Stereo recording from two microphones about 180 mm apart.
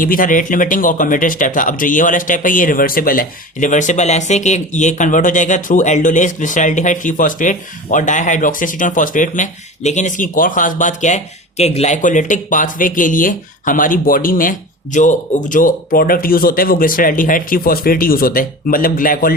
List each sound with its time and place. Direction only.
0.0 s speech: 50° left (ahead or behind)